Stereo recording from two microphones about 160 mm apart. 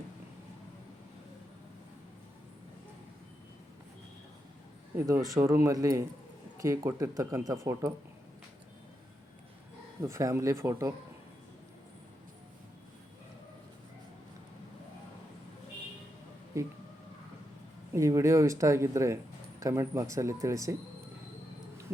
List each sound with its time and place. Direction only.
4.9 s speech: 15° right (ahead or behind)
10.0 s speech: 20° right (ahead or behind)
16.5 s speech: 20° right (ahead or behind)
17.9 s speech: 20° right (ahead or behind)